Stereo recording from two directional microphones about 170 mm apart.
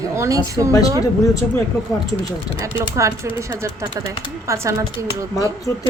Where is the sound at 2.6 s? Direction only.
15° right (ahead or behind).